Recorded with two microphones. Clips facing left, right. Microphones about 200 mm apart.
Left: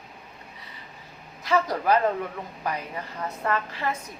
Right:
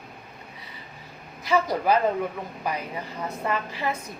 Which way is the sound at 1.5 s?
5° right (ahead or behind).